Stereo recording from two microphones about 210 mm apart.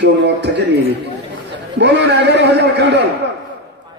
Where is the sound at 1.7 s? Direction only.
55° right (ahead or behind).